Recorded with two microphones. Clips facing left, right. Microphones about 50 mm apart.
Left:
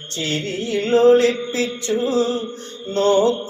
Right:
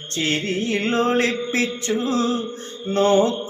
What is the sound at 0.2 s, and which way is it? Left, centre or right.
Mantra, right.